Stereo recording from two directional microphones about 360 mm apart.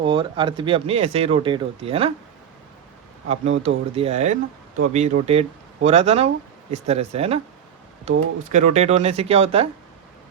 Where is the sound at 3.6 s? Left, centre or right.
Centre.